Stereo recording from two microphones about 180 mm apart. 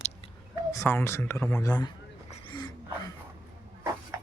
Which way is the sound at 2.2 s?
30° left (ahead or behind).